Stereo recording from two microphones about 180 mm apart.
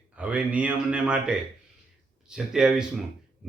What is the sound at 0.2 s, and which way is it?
A man's voice, 5° right (ahead or behind).